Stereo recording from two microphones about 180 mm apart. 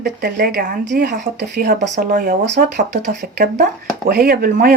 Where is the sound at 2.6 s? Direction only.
65° right (ahead or behind).